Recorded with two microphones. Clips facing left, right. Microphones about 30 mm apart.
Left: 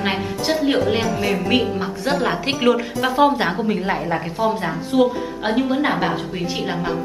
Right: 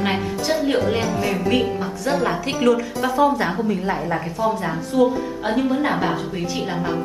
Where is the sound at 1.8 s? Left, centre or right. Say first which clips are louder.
Left 1 dB; left.